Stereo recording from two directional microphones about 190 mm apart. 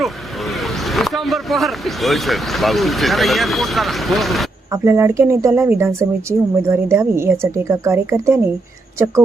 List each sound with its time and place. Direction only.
0.0 s speech: centre (ahead or behind)
4.7 s a woman's voice: 10° right (ahead or behind)